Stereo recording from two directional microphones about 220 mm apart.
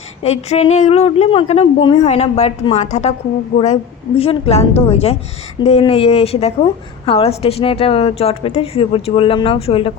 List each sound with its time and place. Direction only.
0.2 s a woman's voice: 30° left (ahead or behind)
4.2 s a woman's voice: 25° left (ahead or behind)